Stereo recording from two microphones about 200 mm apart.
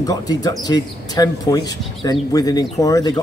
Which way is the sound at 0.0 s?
20° left (ahead or behind).